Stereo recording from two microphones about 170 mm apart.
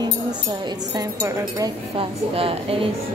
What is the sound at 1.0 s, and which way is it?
Speech, 20° right (ahead or behind).